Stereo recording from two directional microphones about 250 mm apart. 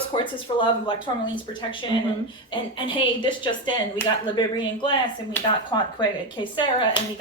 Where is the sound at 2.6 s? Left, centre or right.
Centre.